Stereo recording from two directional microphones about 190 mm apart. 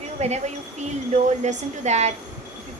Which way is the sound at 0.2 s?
35° right (ahead or behind).